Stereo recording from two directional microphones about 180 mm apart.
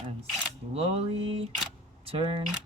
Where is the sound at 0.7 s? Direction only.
35° right (ahead or behind).